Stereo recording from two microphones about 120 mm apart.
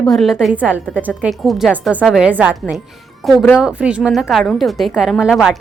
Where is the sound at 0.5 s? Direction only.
15° right (ahead or behind).